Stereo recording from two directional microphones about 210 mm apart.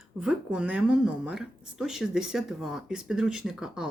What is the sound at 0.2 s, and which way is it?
Speech, 5° right (ahead or behind).